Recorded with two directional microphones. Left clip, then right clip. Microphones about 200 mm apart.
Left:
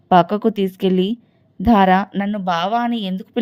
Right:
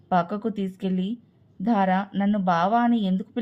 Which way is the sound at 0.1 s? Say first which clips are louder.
Left 10 dB; 40° left (ahead or behind).